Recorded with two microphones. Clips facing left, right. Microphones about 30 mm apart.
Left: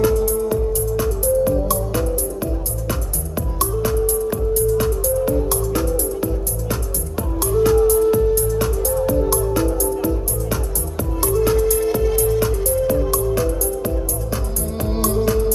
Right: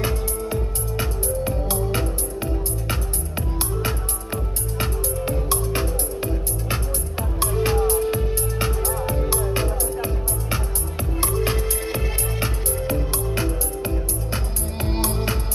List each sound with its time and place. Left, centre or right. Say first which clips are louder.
0.0 s music: left 9 dB; right